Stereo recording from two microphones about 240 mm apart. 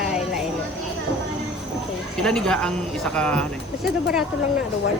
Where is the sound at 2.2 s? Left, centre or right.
Centre.